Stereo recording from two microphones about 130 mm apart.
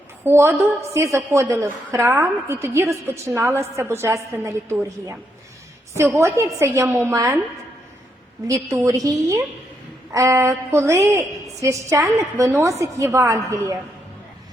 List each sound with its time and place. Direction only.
0.3 s a woman's voice: 20° right (ahead or behind)
6.1 s a woman's voice: 20° right (ahead or behind)
8.4 s a woman's voice: 25° right (ahead or behind)